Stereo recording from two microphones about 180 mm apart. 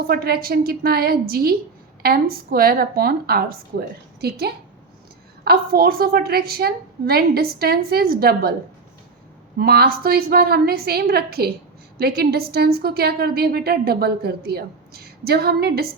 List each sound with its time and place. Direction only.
0.1 s a woman's voice: 55° right (ahead or behind)
9.6 s a woman's voice: 60° right (ahead or behind)